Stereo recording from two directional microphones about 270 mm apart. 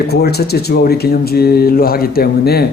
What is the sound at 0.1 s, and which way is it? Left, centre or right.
Speech, left.